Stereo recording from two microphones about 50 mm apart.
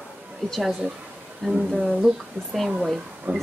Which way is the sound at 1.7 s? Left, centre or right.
Centre.